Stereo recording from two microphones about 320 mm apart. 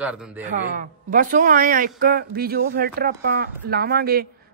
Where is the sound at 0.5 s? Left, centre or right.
Right.